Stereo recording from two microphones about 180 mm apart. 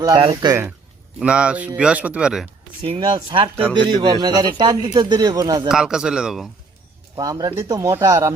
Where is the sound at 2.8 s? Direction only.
30° right (ahead or behind).